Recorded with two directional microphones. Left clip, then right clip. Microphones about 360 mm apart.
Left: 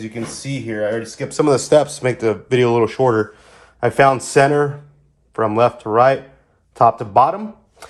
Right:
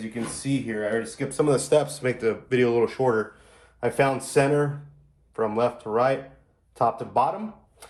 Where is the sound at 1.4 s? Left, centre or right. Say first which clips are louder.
Left 8 dB; left.